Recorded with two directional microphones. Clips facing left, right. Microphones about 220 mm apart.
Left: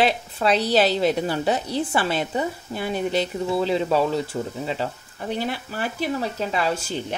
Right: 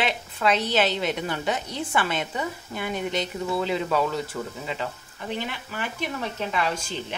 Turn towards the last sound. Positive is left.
turn(degrees=40)  # may be behind; listen again after turning